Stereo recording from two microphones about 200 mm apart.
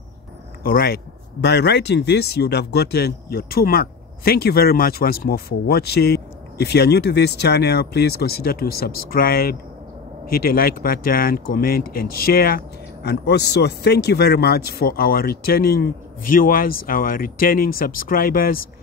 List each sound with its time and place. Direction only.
0.7 s speech: 50° left (ahead or behind)